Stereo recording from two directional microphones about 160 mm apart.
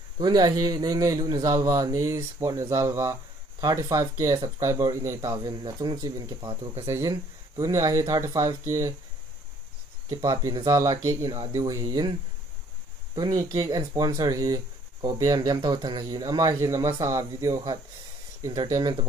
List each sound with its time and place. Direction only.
0.2 s speech: 25° right (ahead or behind)
10.0 s speech: 20° right (ahead or behind)